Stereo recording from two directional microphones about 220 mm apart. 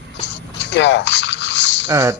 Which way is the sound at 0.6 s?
55° left (ahead or behind).